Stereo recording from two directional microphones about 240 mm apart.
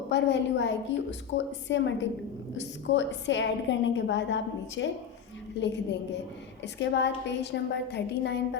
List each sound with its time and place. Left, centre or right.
0.1 s a woman's voice: left